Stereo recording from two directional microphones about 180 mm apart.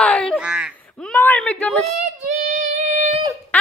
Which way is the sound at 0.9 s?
10° left (ahead or behind).